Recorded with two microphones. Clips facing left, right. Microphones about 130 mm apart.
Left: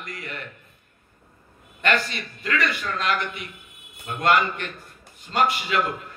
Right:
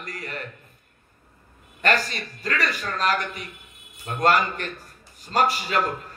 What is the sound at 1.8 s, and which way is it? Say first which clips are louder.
A man's voice: even; 40° right (ahead or behind).